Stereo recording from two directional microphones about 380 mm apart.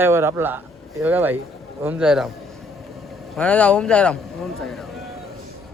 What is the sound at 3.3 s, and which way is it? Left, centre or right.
Speech, centre.